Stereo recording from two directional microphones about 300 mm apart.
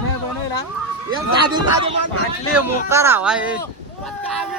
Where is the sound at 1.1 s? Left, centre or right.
Centre.